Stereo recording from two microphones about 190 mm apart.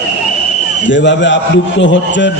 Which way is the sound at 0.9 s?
70° left (ahead or behind).